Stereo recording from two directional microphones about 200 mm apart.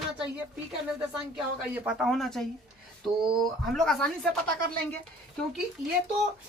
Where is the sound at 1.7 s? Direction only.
5° right (ahead or behind).